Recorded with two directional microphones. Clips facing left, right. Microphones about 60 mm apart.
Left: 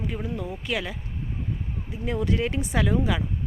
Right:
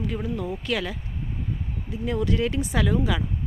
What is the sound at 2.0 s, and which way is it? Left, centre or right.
Speech, left.